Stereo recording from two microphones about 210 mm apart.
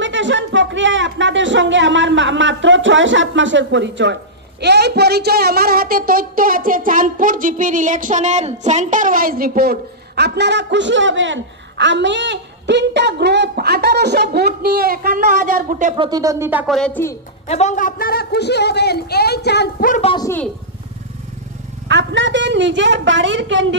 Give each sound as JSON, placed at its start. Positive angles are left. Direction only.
{"t": 0.0, "sound": "speech", "side_deg": -60}
{"t": 16.0, "sound": "speech", "side_deg": -20}
{"t": 17.5, "sound": "a man's voice", "side_deg": 35}
{"t": 20.1, "sound": "speech", "side_deg": 20}
{"t": 21.8, "sound": "a woman's voice", "side_deg": -60}